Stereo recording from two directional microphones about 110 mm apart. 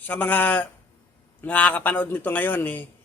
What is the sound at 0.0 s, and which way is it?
A man's voice, 15° left (ahead or behind).